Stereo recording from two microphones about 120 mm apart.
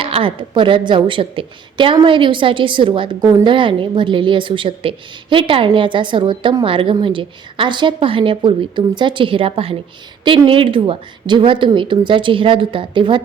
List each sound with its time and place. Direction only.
0.0 s a woman's voice: 50° right (ahead or behind)